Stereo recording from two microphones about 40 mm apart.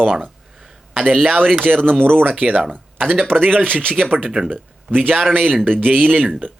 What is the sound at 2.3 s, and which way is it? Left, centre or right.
Speech, right.